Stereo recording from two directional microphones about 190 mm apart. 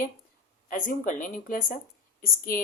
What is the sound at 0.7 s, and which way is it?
Speech, 45° left (ahead or behind).